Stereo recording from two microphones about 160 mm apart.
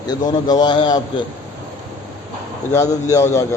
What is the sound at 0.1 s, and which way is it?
Speech, 25° left (ahead or behind).